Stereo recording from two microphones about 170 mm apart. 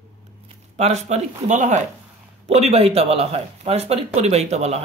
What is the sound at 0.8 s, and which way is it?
Speech, 40° right (ahead or behind).